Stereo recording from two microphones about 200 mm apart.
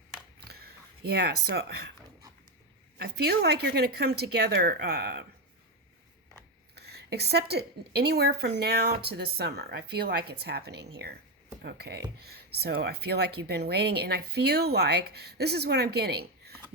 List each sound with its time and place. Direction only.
0.3 s a sound: 50° right (ahead or behind)
3.0 s speech: 50° right (ahead or behind)
6.7 s a woman's voice: 55° right (ahead or behind)